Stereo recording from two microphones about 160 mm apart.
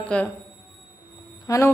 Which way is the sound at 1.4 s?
20° left (ahead or behind).